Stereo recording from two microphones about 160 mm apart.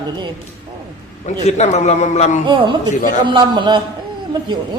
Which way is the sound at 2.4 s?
30° right (ahead or behind).